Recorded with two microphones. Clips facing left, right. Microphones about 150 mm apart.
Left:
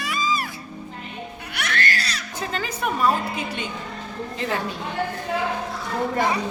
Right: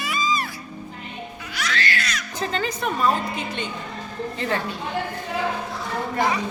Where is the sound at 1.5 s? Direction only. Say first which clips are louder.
Even; 60° left (ahead or behind).